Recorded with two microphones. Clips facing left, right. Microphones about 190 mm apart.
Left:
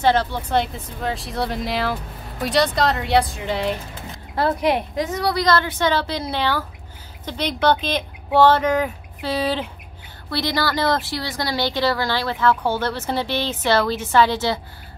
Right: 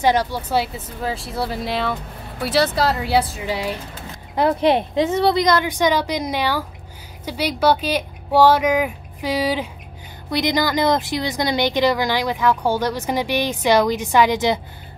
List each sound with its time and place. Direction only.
0.0 s speech: 10° right (ahead or behind)
4.6 s speech: 25° right (ahead or behind)